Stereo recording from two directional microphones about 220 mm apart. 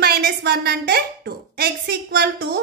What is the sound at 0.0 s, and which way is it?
A woman's voice, 45° right (ahead or behind).